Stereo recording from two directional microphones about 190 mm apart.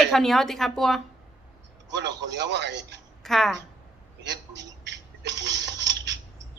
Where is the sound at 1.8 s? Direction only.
65° right (ahead or behind).